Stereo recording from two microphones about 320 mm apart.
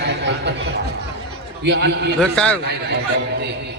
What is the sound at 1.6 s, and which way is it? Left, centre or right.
Speech, right.